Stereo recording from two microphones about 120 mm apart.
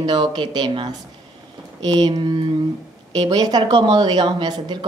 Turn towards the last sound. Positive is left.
turn(degrees=-40)  # may be behind; listen again after turning